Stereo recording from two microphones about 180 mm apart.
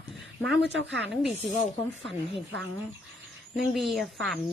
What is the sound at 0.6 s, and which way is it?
Speech, 75° right (ahead or behind).